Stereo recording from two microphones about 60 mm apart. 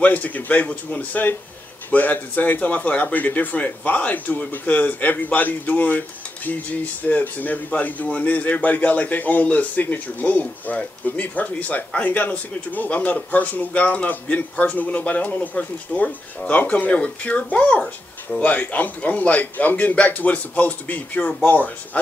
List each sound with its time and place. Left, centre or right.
0.0 s speech: left